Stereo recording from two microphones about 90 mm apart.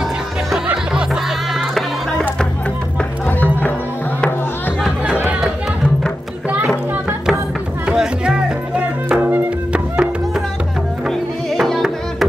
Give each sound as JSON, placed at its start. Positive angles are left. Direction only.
{"t": 3.3, "sound": "music", "side_deg": 20}
{"t": 5.0, "sound": "music", "side_deg": -15}
{"t": 7.8, "sound": "music", "side_deg": -5}
{"t": 11.1, "sound": "music", "side_deg": 0}